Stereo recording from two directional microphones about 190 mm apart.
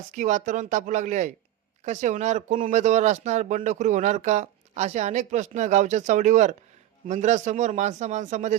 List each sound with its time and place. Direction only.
0.1 s speech: 40° right (ahead or behind)